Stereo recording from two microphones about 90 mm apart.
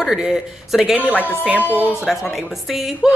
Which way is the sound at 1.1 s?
20° left (ahead or behind).